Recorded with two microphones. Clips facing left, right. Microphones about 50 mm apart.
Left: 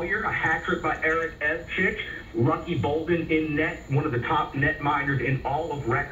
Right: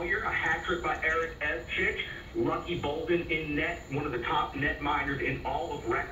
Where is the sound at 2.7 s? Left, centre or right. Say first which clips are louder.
Left 5 dB; centre.